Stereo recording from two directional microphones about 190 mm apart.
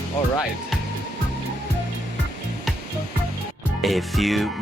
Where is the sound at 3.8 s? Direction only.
Centre (ahead or behind).